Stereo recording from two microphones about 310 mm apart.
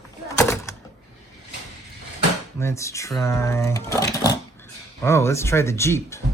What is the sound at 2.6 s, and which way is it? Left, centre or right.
Speech, centre.